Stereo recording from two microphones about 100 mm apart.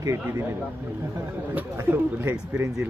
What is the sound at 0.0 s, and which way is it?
Speech, 30° right (ahead or behind).